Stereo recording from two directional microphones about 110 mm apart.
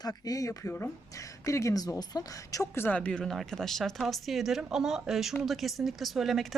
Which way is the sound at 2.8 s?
15° left (ahead or behind).